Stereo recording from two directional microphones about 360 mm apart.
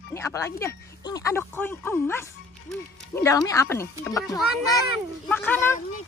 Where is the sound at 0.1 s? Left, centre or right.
Centre.